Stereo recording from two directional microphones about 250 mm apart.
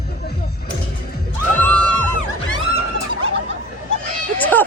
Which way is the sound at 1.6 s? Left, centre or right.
Right.